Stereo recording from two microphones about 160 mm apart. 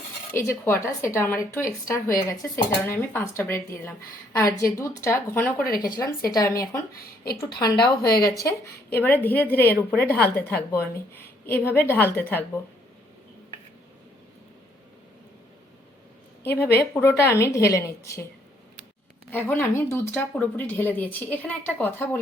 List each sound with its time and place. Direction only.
0.3 s a woman's voice: 15° left (ahead or behind)
5.7 s speech: 65° left (ahead or behind)
6.0 s a woman's voice: 20° left (ahead or behind)
16.4 s a woman's voice: 15° left (ahead or behind)
19.3 s a woman's voice: 10° left (ahead or behind)